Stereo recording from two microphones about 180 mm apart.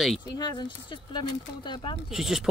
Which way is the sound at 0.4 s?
25° left (ahead or behind).